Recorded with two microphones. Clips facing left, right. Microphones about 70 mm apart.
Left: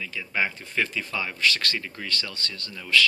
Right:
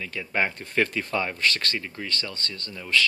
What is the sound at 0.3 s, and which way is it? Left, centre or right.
Speech, right.